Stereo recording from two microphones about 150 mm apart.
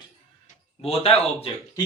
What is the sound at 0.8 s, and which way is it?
Speech, 40° left (ahead or behind).